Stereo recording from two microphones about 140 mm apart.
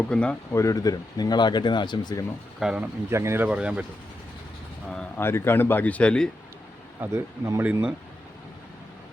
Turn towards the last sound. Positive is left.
turn(degrees=-15)  # may be behind; listen again after turning